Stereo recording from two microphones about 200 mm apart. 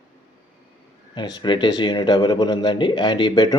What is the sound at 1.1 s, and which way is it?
Speech, 20° left (ahead or behind).